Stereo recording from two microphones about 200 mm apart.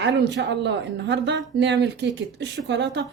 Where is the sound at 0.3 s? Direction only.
60° right (ahead or behind).